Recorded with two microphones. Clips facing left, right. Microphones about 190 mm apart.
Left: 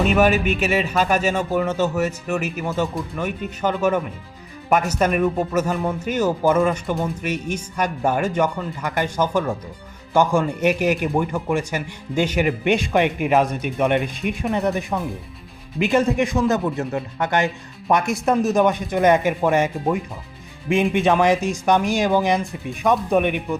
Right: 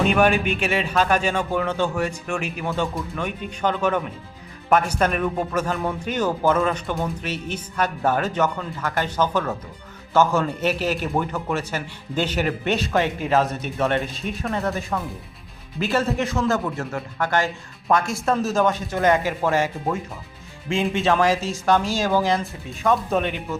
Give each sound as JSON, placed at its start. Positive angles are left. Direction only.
{"t": 0.0, "sound": "speech", "side_deg": 5}